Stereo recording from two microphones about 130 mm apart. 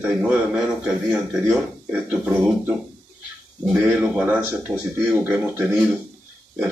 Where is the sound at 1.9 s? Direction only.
10° right (ahead or behind).